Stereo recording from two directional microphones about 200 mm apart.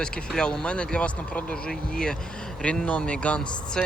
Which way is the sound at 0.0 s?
5° left (ahead or behind).